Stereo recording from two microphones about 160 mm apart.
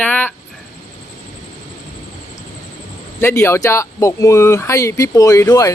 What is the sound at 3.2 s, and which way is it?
Speech, 15° left (ahead or behind).